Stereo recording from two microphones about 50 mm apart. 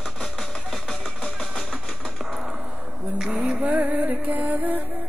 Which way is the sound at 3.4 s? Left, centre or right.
Right.